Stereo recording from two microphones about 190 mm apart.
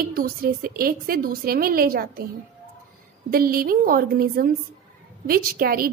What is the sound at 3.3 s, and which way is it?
A woman's voice, 50° right (ahead or behind).